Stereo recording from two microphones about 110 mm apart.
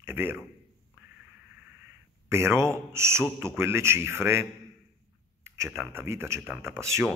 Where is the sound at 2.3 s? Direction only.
25° right (ahead or behind).